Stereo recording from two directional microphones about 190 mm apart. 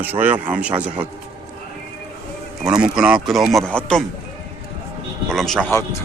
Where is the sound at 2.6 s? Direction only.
20° right (ahead or behind).